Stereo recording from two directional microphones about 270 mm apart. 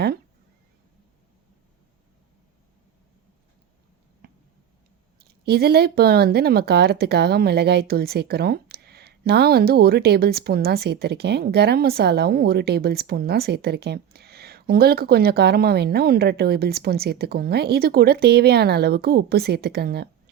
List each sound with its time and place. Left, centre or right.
5.3 s speech: right